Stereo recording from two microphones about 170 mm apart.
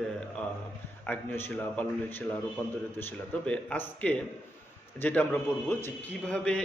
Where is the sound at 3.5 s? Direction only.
5° left (ahead or behind).